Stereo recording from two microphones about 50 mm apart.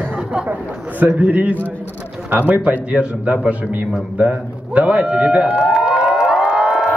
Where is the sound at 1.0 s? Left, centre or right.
Right.